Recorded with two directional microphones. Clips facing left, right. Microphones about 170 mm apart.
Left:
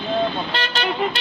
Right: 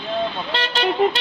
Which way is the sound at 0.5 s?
25° right (ahead or behind).